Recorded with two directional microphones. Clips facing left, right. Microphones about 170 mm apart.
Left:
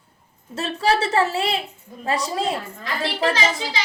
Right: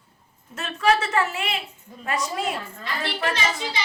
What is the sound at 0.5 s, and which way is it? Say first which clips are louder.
A woman's voice: left 1 dB; 30° left (ahead or behind).